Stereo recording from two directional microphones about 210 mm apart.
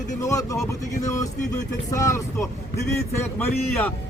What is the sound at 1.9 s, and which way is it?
Speech, 15° left (ahead or behind).